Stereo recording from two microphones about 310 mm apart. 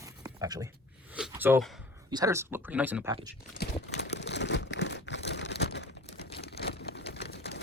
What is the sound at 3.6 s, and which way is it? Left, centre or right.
Crumpling, left.